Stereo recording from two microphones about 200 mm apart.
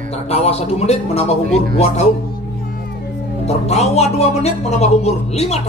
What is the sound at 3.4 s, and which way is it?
Speech, 35° left (ahead or behind).